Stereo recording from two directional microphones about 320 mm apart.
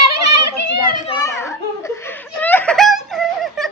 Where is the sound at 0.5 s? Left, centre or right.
Left.